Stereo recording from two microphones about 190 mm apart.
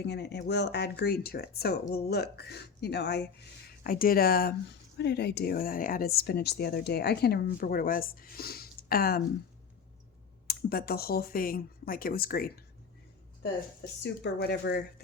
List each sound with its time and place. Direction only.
0.0 s speech: 60° left (ahead or behind)
3.8 s speech: 50° left (ahead or behind)
10.4 s speech: 55° left (ahead or behind)
14.0 s speech: 65° left (ahead or behind)